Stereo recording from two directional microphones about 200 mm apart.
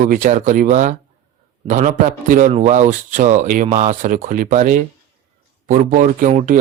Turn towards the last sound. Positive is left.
turn(degrees=-40)  # may be behind; listen again after turning